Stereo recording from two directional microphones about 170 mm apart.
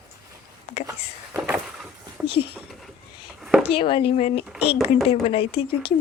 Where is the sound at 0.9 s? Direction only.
15° right (ahead or behind).